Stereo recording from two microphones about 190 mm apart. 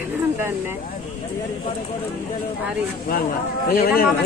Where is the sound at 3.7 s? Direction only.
50° left (ahead or behind).